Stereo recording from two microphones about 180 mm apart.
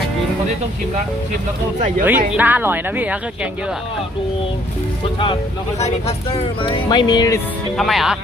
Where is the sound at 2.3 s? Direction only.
10° right (ahead or behind).